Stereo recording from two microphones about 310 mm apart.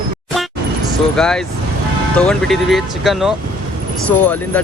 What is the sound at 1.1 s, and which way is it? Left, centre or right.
Speech, centre.